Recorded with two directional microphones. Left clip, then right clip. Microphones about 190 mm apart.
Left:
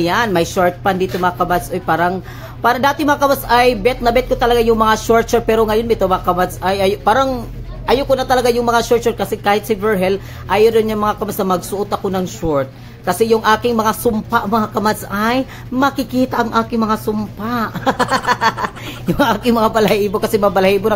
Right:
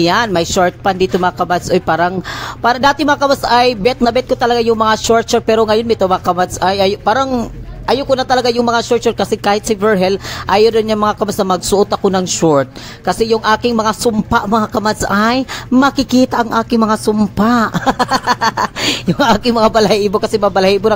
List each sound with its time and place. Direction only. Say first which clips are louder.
0.0 s speech: right 2 dB; 50° right (ahead or behind)